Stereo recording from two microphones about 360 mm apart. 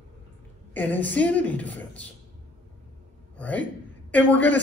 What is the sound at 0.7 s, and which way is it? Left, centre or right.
A woman's voice, centre.